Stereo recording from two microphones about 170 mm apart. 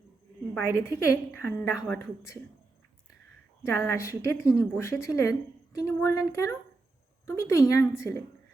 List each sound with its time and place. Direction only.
0.5 s a woman's voice: 15° left (ahead or behind)
1.7 s a woman's voice: 5° right (ahead or behind)
2.0 s a woman's voice: 15° left (ahead or behind)
3.6 s a woman's voice: 15° left (ahead or behind)